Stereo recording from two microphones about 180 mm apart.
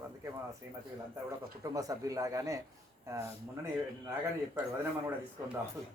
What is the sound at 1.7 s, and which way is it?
Speech, 20° right (ahead or behind).